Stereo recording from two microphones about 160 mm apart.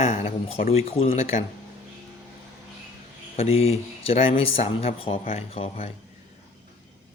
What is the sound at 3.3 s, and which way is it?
Speech, 40° left (ahead or behind).